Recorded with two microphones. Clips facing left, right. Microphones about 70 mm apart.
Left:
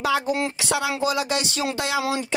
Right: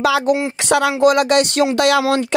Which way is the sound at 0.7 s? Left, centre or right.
Right.